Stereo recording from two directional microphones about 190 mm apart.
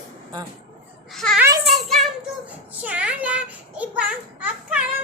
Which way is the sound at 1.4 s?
15° right (ahead or behind).